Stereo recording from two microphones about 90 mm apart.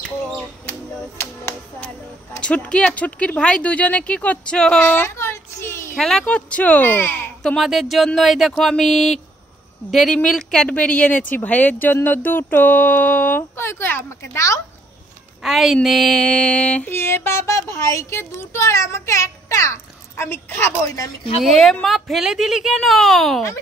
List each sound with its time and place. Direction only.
2.4 s speech: 15° left (ahead or behind)
4.8 s music: 25° left (ahead or behind)
5.9 s speech: 5° left (ahead or behind); by 7.2 s 25° left (ahead or behind)
7.4 s speech: centre (ahead or behind); by 14.0 s 25° left (ahead or behind)
14.3 s speech: 35° left (ahead or behind)
15.4 s speech: centre (ahead or behind); by 16.9 s 15° left (ahead or behind)
16.9 s speech: 25° left (ahead or behind)
21.4 s speech: 5° left (ahead or behind)